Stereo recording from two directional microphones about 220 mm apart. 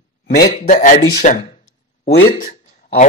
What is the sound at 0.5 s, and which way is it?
Speech, 35° left (ahead or behind).